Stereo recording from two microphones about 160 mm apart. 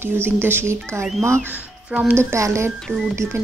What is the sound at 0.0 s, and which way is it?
Speech, 15° right (ahead or behind).